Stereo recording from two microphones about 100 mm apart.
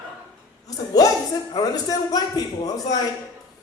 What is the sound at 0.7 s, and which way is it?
A woman's voice, 40° left (ahead or behind).